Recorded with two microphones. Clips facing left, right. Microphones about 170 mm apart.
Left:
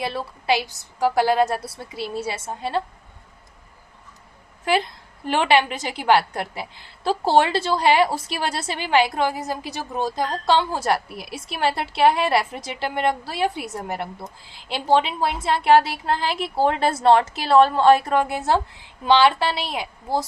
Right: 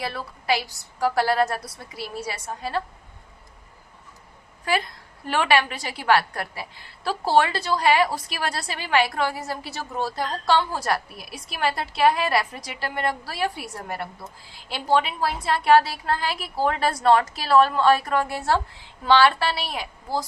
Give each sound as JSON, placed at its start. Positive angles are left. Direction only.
{"t": 0.0, "sound": "a woman's voice", "side_deg": 25}
{"t": 4.6, "sound": "a woman's voice", "side_deg": 25}